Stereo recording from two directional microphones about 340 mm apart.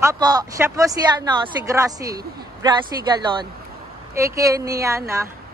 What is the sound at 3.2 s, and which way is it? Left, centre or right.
Speech, centre.